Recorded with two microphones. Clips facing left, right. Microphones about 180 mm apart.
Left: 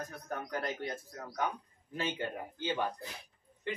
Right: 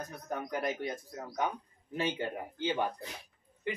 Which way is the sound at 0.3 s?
15° right (ahead or behind).